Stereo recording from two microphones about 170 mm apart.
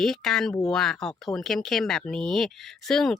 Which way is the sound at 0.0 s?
Centre (ahead or behind).